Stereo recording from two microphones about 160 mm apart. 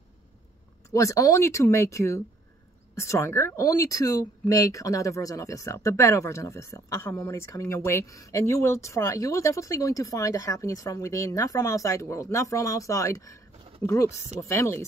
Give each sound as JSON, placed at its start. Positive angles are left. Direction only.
{"t": 0.9, "sound": "speech", "side_deg": 20}